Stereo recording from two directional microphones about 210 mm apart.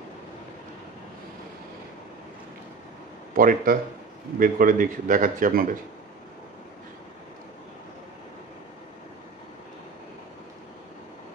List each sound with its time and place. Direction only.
3.3 s a man's voice: 40° right (ahead or behind)